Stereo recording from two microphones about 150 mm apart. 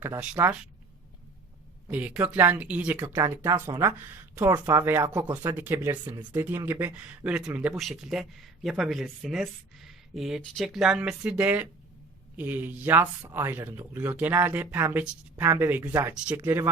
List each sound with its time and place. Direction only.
0.2 s speech: 15° right (ahead or behind)
1.9 s speech: 10° right (ahead or behind)
3.2 s speech: 25° right (ahead or behind)